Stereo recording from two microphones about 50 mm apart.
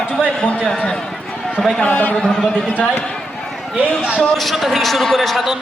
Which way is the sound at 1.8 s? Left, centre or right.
Left.